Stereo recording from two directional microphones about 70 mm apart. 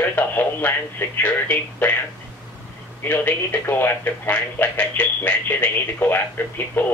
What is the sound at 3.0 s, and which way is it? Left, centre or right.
Speech, left.